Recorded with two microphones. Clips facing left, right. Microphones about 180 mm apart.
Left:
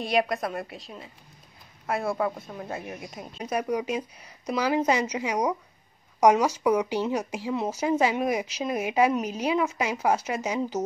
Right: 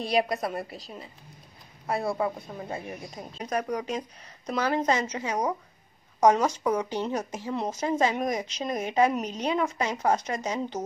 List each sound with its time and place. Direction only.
0.0 s a woman's voice: centre (ahead or behind)